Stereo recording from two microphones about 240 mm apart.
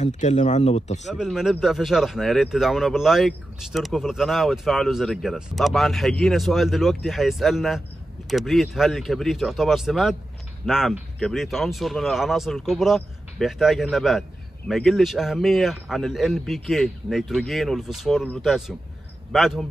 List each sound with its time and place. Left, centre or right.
0.0 s speech: left
1.1 s speech: centre